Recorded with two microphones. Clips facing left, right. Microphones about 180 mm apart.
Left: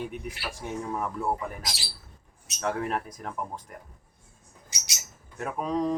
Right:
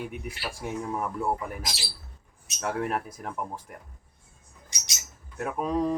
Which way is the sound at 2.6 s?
5° right (ahead or behind).